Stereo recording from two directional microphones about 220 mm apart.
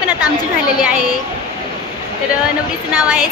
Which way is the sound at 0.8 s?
5° right (ahead or behind).